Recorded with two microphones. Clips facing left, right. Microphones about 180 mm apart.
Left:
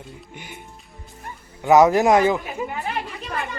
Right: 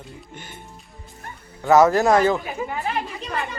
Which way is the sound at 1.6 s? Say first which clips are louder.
Left 1 dB; 15° left (ahead or behind).